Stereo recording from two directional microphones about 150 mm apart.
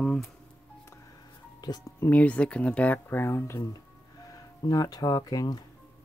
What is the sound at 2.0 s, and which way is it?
Speech, 10° left (ahead or behind).